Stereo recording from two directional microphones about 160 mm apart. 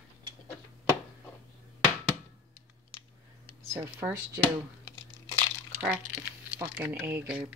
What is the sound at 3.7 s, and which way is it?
Speech, 15° right (ahead or behind).